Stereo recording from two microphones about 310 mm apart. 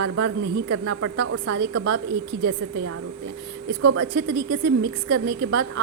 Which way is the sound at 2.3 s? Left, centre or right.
Right.